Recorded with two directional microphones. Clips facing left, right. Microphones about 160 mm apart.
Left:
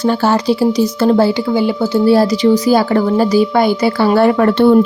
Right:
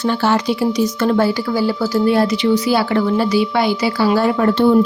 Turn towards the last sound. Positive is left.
turn(degrees=60)  # may be behind; listen again after turning